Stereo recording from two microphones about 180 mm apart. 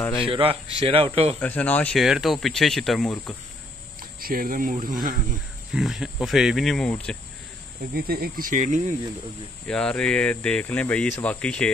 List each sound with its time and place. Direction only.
0.3 s speech: 30° right (ahead or behind)
1.4 s speech: 10° left (ahead or behind)
4.2 s speech: 55° right (ahead or behind)
5.7 s speech: 5° right (ahead or behind)
7.9 s speech: 55° right (ahead or behind)
9.7 s speech: 5° left (ahead or behind)